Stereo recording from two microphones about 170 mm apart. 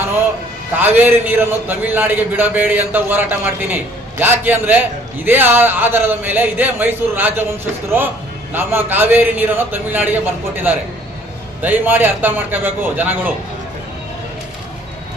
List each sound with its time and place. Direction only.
0.8 s a man's voice: 10° right (ahead or behind)